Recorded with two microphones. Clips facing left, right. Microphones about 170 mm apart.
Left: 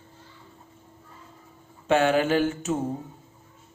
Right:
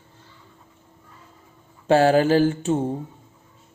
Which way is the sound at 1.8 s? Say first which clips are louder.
Right 5 dB; 35° right (ahead or behind).